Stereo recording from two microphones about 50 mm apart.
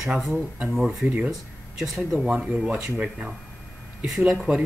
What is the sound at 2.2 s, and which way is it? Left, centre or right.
Speech, centre.